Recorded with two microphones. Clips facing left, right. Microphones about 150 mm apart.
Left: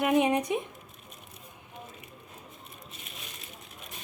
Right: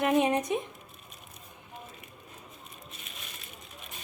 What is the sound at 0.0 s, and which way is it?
Speech, 15° left (ahead or behind).